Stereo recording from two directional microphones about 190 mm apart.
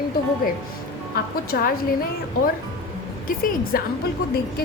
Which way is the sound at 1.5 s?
50° left (ahead or behind).